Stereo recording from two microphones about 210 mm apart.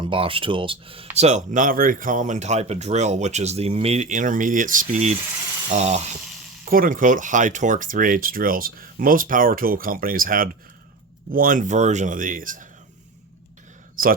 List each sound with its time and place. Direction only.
0.0 s speech: 25° right (ahead or behind)
14.0 s a man's voice: 40° right (ahead or behind)